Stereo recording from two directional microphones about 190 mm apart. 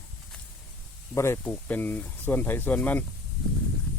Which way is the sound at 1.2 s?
15° left (ahead or behind).